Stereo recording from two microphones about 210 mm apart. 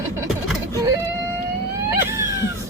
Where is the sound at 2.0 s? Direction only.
10° right (ahead or behind).